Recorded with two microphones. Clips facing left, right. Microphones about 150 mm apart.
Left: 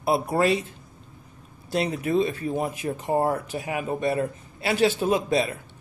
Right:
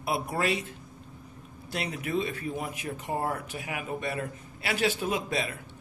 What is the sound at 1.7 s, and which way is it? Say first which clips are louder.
Speech: left 7 dB; 30° left (ahead or behind).